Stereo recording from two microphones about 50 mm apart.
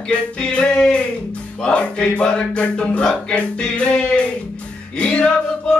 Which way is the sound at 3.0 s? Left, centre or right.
Centre.